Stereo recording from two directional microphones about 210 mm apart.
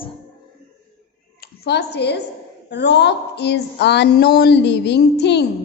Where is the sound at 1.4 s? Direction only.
50° left (ahead or behind).